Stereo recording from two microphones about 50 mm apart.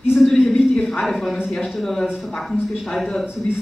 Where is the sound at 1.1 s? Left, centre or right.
Centre.